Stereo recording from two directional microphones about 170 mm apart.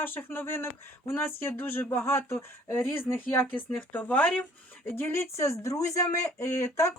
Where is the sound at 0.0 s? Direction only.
10° left (ahead or behind).